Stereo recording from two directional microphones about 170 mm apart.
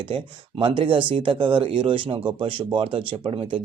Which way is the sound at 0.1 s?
30° right (ahead or behind).